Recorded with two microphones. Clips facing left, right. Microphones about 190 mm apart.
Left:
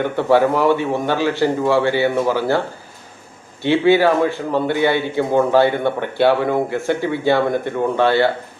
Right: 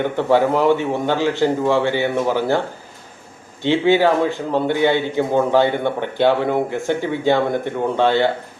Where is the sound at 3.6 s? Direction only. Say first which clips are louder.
Left 1 dB; 15° right (ahead or behind).